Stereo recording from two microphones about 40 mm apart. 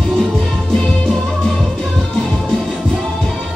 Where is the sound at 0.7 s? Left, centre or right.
Centre.